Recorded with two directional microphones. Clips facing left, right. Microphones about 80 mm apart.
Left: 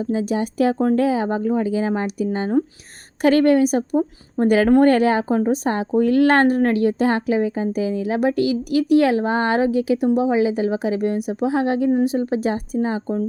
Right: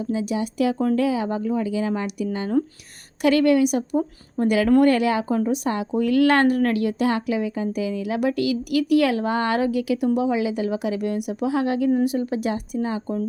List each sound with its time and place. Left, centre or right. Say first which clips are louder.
0.0 s a woman's voice: left 3 dB; left